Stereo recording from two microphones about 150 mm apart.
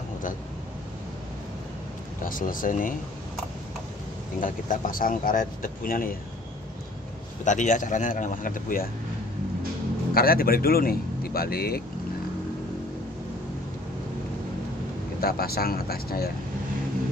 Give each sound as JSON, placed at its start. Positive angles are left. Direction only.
{"t": 2.2, "sound": "speech", "side_deg": 65}
{"t": 4.4, "sound": "speech", "side_deg": 60}
{"t": 7.4, "sound": "speech", "side_deg": 55}
{"t": 10.1, "sound": "speech", "side_deg": 80}
{"t": 15.1, "sound": "speech", "side_deg": 90}